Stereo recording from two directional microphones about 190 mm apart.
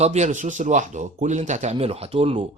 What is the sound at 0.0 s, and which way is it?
Speech, 35° right (ahead or behind).